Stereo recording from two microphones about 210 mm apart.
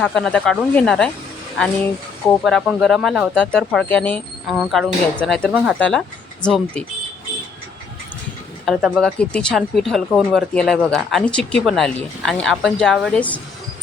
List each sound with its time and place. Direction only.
0.0 s speech: 5° left (ahead or behind)
8.6 s speech: centre (ahead or behind)